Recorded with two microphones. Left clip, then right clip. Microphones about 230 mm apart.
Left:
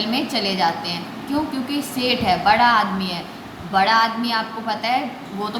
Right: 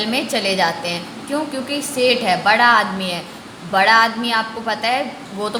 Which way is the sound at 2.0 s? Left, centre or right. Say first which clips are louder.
Right 4 dB; right.